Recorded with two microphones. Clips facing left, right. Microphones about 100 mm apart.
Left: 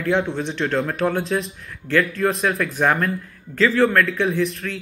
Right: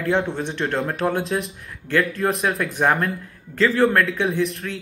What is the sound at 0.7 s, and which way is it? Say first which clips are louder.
A man's voice: left 1 dB; 30° right (ahead or behind).